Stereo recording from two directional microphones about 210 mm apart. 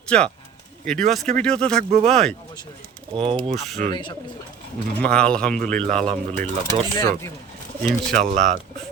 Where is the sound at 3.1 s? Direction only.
25° right (ahead or behind).